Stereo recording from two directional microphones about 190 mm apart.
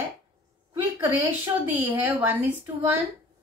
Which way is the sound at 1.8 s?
10° right (ahead or behind).